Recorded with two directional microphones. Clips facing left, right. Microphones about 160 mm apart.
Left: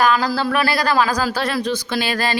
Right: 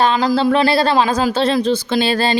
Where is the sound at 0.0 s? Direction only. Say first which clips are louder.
Right 3 dB; 25° right (ahead or behind).